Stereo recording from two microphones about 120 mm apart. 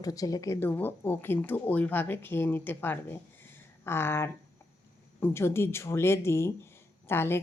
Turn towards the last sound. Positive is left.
turn(degrees=20)  # may be behind; listen again after turning